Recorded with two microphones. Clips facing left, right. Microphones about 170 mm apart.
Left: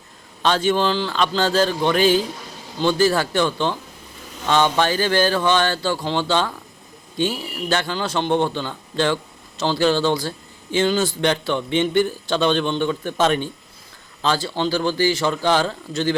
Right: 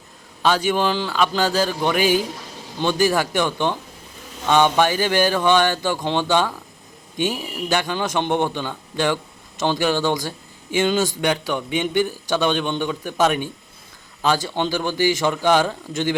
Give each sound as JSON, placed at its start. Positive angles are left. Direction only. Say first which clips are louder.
{"t": 0.4, "sound": "speech", "louder": "even", "side_deg": -10}